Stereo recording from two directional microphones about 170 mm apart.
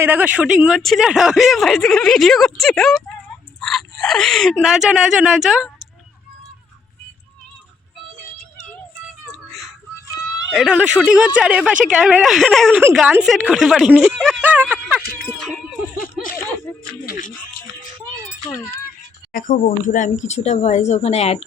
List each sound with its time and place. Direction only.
0.0 s speech: 10° right (ahead or behind)
9.5 s a sound: centre (ahead or behind)
10.5 s speech: 5° right (ahead or behind)
15.4 s a sound: 5° left (ahead or behind)
16.8 s speech: 60° left (ahead or behind)
19.3 s speech: 50° left (ahead or behind)